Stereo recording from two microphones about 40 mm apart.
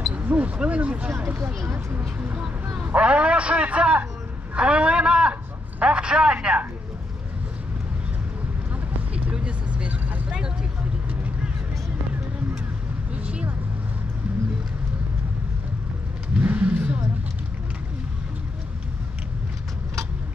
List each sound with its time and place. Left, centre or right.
0.1 s single-lens reflex camera: right
0.6 s a man's voice: right
1.9 s speech: right
2.9 s a man's voice: right
9.1 s vehicle: right
13.1 s vehicle: right
16.4 s vehicle: right